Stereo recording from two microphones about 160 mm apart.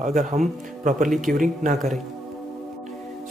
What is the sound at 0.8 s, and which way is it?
Speech, 55° right (ahead or behind).